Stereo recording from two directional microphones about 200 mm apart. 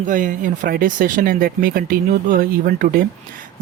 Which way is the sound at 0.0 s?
40° right (ahead or behind).